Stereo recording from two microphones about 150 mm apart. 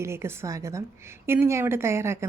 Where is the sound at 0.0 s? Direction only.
15° right (ahead or behind).